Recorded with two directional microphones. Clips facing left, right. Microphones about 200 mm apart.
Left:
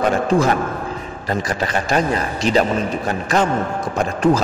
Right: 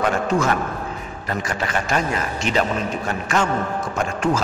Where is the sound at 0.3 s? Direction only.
35° left (ahead or behind).